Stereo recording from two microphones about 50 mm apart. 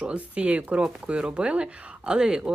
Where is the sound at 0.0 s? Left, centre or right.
Right.